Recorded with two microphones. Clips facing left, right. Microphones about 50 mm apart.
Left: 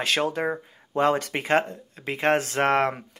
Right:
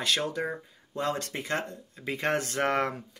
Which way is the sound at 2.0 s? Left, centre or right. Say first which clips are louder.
Left 6 dB; left.